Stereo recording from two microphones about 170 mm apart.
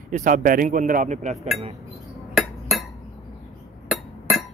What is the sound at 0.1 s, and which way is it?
Speech, 50° right (ahead or behind).